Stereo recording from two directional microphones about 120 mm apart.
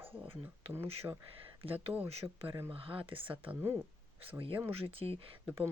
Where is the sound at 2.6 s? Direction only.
50° right (ahead or behind).